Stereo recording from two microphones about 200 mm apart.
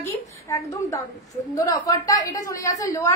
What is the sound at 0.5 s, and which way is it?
A woman's voice, 15° left (ahead or behind).